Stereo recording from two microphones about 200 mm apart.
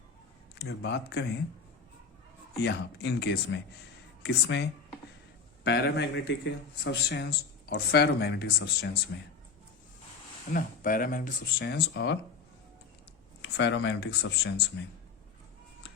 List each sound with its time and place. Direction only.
0.6 s speech: 55° left (ahead or behind)
2.6 s speech: 60° left (ahead or behind)
10.5 s speech: 45° left (ahead or behind)
13.4 s speech: 60° left (ahead or behind)